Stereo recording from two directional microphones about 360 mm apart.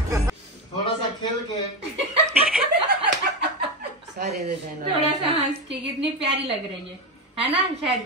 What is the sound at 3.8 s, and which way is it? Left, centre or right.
Chuckle, right.